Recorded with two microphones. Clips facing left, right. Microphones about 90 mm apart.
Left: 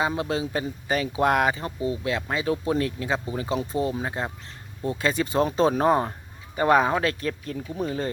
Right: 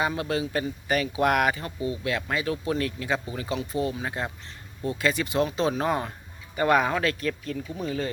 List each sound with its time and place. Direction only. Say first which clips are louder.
0.0 s speech: left 1 dB; 25° left (ahead or behind)